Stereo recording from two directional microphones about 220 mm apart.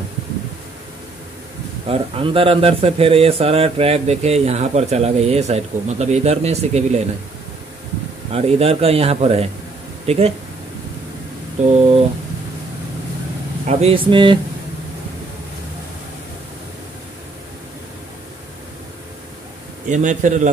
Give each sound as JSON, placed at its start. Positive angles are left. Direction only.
{"t": 1.9, "sound": "speech", "side_deg": -25}
{"t": 8.3, "sound": "speech", "side_deg": -25}
{"t": 11.6, "sound": "a man's voice", "side_deg": -30}
{"t": 13.7, "sound": "speech", "side_deg": -30}
{"t": 19.9, "sound": "a man's voice", "side_deg": -35}